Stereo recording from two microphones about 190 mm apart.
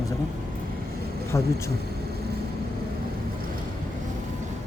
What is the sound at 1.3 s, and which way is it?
Speech, 15° left (ahead or behind).